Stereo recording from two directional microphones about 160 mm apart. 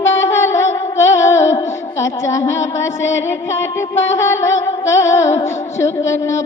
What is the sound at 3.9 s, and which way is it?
Music, 15° left (ahead or behind).